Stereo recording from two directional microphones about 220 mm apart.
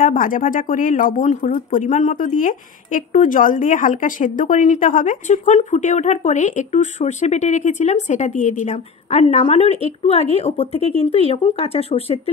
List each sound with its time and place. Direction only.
0.0 s speech: 40° left (ahead or behind)